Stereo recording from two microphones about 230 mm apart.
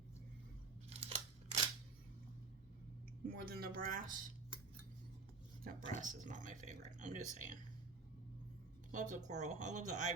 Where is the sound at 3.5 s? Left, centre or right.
Right.